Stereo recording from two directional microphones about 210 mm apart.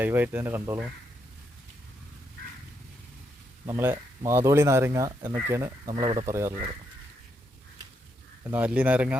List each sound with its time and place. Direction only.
0.0 s speech: 10° right (ahead or behind)
3.7 s speech: 10° right (ahead or behind)
8.4 s speech: 5° right (ahead or behind)